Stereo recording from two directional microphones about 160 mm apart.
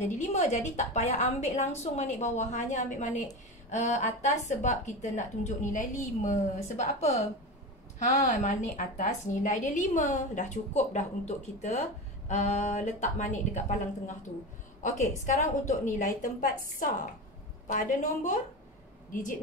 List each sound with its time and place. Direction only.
0.1 s a woman's voice: 50° left (ahead or behind)
17.6 s a woman's voice: 55° left (ahead or behind)